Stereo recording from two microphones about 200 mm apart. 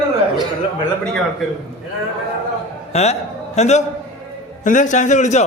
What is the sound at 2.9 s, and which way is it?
A man's voice, 35° left (ahead or behind).